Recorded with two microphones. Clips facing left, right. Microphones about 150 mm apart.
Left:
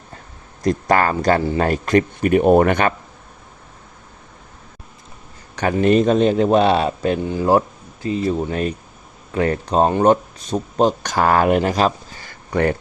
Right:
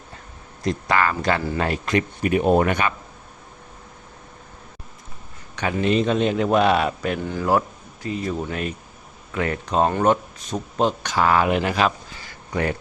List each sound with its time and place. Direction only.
0.6 s speech: 45° left (ahead or behind)
5.5 s speech: 45° left (ahead or behind)